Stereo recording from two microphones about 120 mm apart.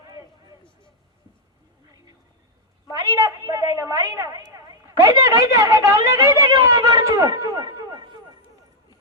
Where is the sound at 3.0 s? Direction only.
30° right (ahead or behind).